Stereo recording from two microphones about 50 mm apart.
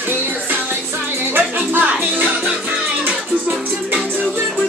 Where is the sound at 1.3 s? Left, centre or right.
Right.